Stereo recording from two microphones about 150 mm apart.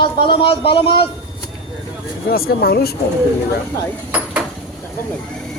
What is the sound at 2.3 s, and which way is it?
Speech, 90° left.